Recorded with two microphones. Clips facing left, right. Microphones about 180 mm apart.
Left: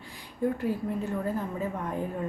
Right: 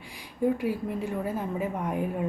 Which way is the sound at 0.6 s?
15° right (ahead or behind).